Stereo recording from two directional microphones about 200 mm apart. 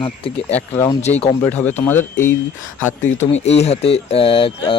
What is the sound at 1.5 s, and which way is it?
Speech, 10° left (ahead or behind).